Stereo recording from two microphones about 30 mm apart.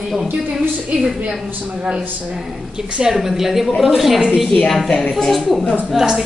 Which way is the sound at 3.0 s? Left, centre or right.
Centre.